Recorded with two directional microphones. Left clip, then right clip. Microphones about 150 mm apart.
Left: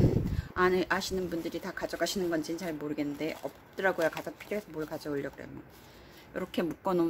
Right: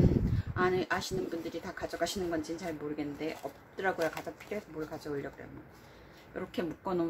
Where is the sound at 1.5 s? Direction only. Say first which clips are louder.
Left 3 dB; 90° left.